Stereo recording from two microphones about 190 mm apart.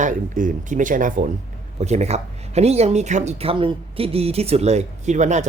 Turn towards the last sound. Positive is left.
turn(degrees=-40)  # may be behind; listen again after turning